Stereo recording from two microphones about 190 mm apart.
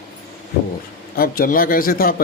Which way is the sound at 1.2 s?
50° left (ahead or behind).